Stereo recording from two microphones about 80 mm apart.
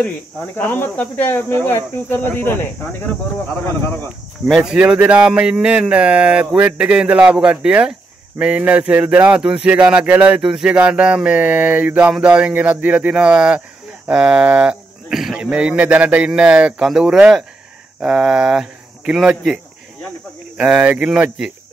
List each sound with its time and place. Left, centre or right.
0.6 s speech: left
4.5 s speech: centre
10.4 s speech: centre
21.1 s speech: centre